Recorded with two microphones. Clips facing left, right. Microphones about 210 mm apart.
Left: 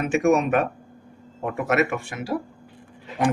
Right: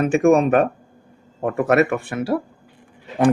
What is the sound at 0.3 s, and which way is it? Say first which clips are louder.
A man's voice: right 5 dB; 30° right (ahead or behind).